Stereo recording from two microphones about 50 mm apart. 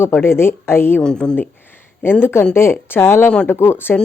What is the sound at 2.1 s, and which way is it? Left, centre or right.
A woman's voice, left.